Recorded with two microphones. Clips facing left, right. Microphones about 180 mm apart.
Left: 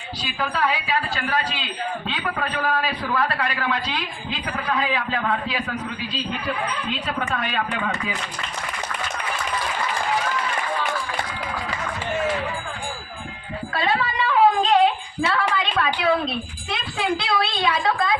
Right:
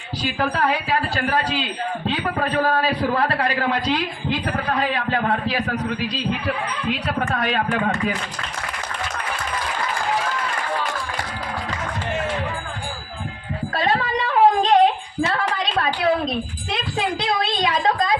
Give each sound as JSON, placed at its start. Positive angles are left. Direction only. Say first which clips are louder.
{"t": 0.3, "sound": "speech", "louder": "right 2 dB", "side_deg": -45}
{"t": 1.1, "sound": "a man's voice", "louder": "right 4 dB", "side_deg": -35}
{"t": 7.2, "sound": "speech", "louder": "right 3 dB", "side_deg": -45}
{"t": 13.7, "sound": "a sound", "louder": "right 2 dB", "side_deg": -40}